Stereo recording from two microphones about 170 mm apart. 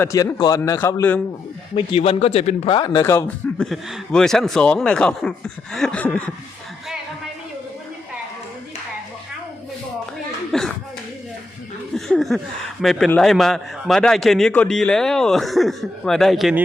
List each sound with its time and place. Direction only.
0.0 s a man's voice: 15° left (ahead or behind)
1.7 s a man's voice: 30° left (ahead or behind)
2.7 s speech: 25° left (ahead or behind)
3.6 s a man's voice: centre (ahead or behind)
10.5 s slap: centre (ahead or behind)
11.9 s a sound: centre (ahead or behind)
13.1 s a man's voice: 5° left (ahead or behind)